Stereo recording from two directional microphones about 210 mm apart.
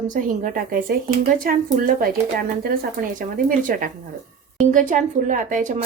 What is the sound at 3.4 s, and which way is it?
A woman's voice, 40° right (ahead or behind).